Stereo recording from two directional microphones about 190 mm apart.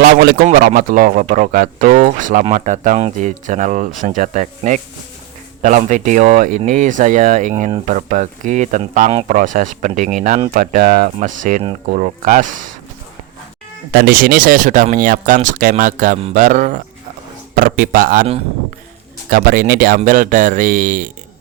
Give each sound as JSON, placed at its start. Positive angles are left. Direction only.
{"t": 0.0, "sound": "a man's voice", "side_deg": -55}
{"t": 13.9, "sound": "speech", "side_deg": -55}
{"t": 19.3, "sound": "speech", "side_deg": -50}